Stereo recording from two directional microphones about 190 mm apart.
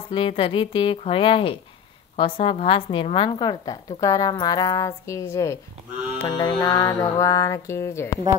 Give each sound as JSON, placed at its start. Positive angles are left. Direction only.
{"t": 0.1, "sound": "a woman's voice", "side_deg": 30}
{"t": 6.1, "sound": "music", "side_deg": 20}